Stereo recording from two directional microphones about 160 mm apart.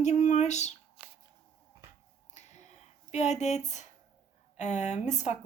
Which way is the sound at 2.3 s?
45° left (ahead or behind).